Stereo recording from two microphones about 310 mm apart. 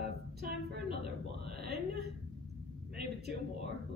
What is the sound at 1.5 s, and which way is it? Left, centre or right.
A man's voice, right.